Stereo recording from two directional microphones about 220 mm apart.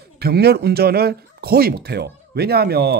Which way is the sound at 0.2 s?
45° right (ahead or behind).